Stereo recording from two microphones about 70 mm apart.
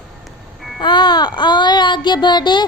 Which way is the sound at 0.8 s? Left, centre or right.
Left.